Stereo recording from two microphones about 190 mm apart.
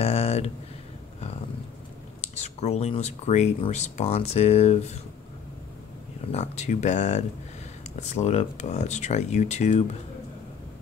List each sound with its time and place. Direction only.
0.0 s a sound: 30° left (ahead or behind)
2.3 s speech: 35° left (ahead or behind)
6.3 s speech: 35° left (ahead or behind)